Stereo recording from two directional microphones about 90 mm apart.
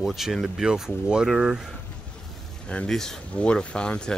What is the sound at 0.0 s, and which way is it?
Speech, centre (ahead or behind).